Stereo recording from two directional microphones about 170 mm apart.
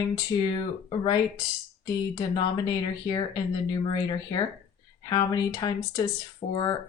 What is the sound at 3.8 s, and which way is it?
Speech, 25° left (ahead or behind).